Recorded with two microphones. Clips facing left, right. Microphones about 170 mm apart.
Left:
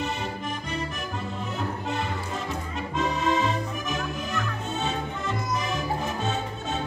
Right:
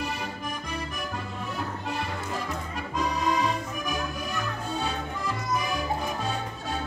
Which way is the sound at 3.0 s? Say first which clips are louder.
Left 2 dB; 25° left (ahead or behind).